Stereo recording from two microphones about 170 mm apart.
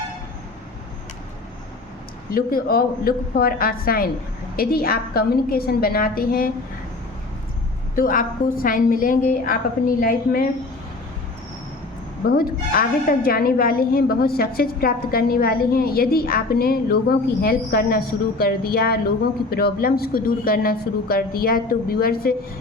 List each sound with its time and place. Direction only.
2.3 s a woman's voice: 60° left (ahead or behind)
7.9 s a woman's voice: 55° left (ahead or behind)
12.3 s a woman's voice: 60° left (ahead or behind)